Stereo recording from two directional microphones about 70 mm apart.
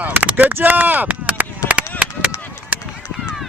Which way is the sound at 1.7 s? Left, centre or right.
Centre.